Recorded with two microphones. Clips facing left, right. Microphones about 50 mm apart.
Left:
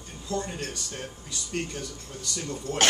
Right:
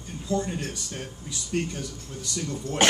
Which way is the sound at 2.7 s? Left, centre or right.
Right.